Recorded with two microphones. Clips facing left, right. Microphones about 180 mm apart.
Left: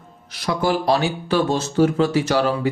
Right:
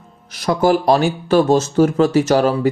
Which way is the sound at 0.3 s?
45° right (ahead or behind).